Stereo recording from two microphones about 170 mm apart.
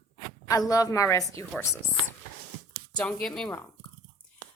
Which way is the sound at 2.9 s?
5° left (ahead or behind).